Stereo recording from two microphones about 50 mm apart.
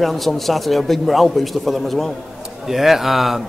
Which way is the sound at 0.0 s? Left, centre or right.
Centre.